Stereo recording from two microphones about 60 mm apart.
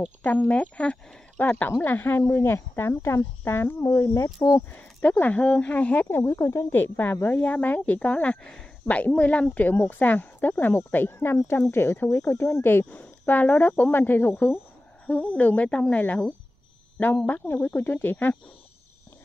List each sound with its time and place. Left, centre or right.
0.2 s speech: left
1.4 s speech: left
3.8 s speech: left
5.2 s speech: left
6.0 s speech: left
11.7 s speech: left
12.6 s speech: left
17.3 s speech: left